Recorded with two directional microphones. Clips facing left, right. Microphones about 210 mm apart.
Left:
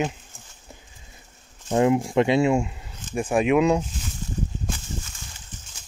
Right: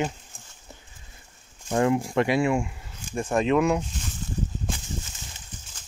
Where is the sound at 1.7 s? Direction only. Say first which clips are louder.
Left 3 dB; 20° left (ahead or behind).